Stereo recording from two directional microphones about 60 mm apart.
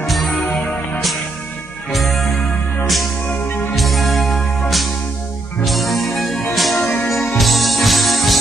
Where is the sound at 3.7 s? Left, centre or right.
Centre.